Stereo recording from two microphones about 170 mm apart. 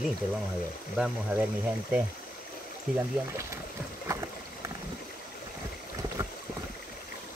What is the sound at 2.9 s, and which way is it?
Speech, 15° right (ahead or behind).